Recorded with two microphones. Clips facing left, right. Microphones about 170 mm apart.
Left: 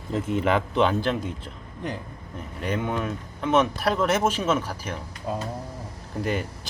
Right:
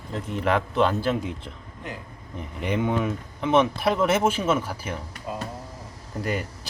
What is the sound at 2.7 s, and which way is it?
Speech, 10° right (ahead or behind).